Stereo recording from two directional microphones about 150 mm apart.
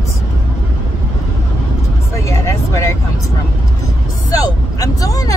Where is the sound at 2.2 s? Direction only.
20° left (ahead or behind).